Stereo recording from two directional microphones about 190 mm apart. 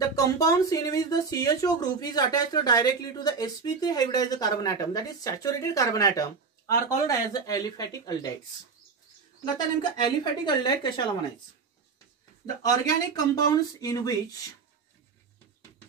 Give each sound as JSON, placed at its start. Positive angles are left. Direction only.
{"t": 0.0, "sound": "speech", "side_deg": 20}
{"t": 9.9, "sound": "speech", "side_deg": 25}
{"t": 12.6, "sound": "speech", "side_deg": 20}